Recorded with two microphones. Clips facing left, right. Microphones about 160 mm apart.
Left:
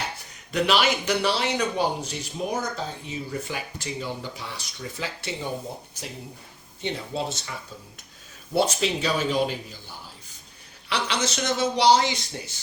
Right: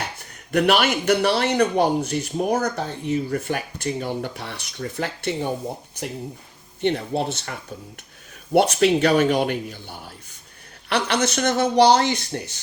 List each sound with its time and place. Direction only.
0.5 s speech: 55° right (ahead or behind)
6.8 s speech: 60° right (ahead or behind)
8.5 s speech: 65° right (ahead or behind)